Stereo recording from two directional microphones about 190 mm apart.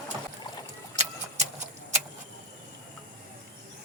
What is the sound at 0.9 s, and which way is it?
Vehicle, 35° right (ahead or behind).